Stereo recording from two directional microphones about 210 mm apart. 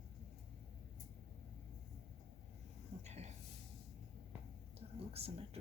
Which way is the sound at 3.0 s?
30° right (ahead or behind).